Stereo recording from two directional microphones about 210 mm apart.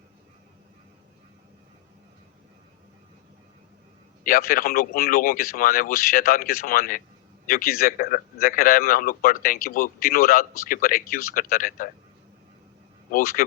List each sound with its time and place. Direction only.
4.2 s a man's voice: 40° left (ahead or behind)
13.1 s speech: 40° left (ahead or behind)